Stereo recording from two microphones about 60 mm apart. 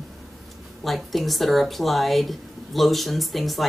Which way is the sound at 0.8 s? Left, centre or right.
Centre.